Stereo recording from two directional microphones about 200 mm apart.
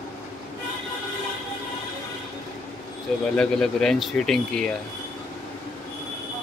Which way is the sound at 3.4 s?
Centre (ahead or behind).